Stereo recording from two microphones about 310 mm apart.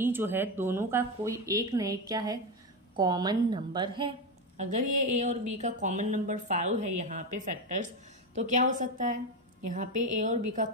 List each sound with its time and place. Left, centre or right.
0.0 s speech: centre; by 10.7 s right